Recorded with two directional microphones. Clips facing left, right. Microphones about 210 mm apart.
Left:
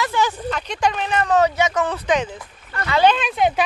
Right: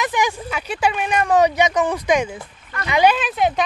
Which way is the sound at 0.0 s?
15° right (ahead or behind).